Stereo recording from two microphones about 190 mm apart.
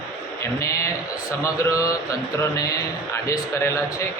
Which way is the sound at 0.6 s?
15° left (ahead or behind).